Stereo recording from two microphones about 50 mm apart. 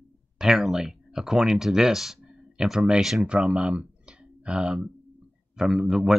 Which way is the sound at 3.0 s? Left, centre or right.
Centre.